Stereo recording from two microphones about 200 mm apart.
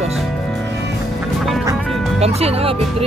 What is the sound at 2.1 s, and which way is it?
Speech, 30° right (ahead or behind).